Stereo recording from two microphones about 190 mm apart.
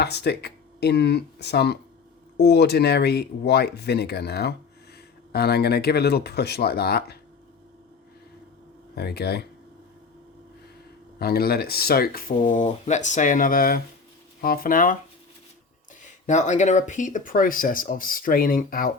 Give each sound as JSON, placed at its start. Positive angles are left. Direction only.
{"t": 0.0, "sound": "speech", "side_deg": 60}
{"t": 9.0, "sound": "speech", "side_deg": 60}
{"t": 11.2, "sound": "speech", "side_deg": 55}
{"t": 12.4, "sound": "speech", "side_deg": 40}
{"t": 16.2, "sound": "speech", "side_deg": 40}